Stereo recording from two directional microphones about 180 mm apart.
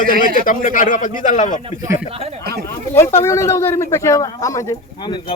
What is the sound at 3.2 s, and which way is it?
A man's voice, 15° left (ahead or behind).